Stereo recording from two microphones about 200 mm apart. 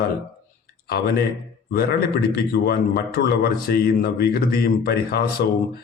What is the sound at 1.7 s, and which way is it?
A man's voice, 50° left (ahead or behind).